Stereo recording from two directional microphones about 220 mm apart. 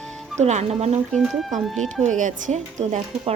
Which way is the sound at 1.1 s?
5° left (ahead or behind).